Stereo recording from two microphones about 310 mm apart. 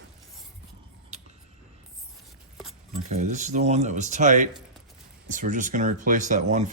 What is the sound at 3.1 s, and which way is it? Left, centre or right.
Speech, right.